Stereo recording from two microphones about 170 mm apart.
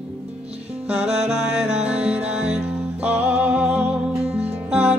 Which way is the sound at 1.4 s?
5° right (ahead or behind).